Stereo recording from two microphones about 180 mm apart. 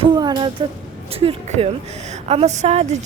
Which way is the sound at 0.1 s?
25° right (ahead or behind).